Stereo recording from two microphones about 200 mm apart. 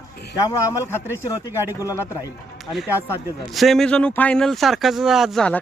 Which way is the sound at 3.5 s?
Centre (ahead or behind).